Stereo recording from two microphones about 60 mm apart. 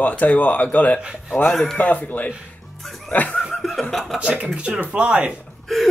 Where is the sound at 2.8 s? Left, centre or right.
Centre.